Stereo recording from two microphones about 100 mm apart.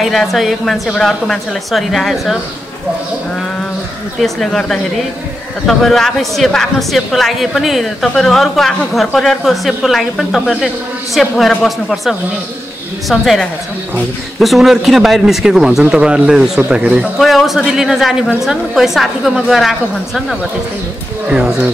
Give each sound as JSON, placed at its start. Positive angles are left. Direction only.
{"t": 0.0, "sound": "speech", "side_deg": 0}
{"t": 4.2, "sound": "speech", "side_deg": 5}
{"t": 21.3, "sound": "speech", "side_deg": -5}